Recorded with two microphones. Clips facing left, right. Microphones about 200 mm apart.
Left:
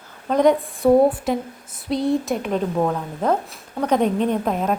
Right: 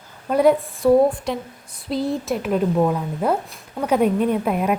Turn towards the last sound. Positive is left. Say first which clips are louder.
# right 1 dB
turn(degrees=-10)  # may be behind; listen again after turning